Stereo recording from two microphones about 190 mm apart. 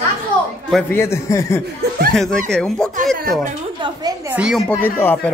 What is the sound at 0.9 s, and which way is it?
Speech, 15° left (ahead or behind).